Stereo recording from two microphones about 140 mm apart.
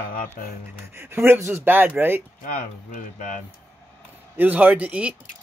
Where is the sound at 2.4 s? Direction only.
75° left (ahead or behind).